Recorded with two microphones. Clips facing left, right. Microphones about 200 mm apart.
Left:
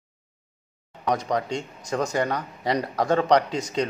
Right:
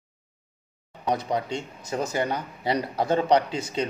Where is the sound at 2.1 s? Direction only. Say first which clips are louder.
Left 2 dB; 25° right (ahead or behind).